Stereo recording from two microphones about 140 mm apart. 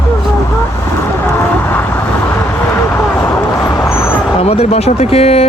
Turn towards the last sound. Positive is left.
turn(degrees=45)  # may be behind; listen again after turning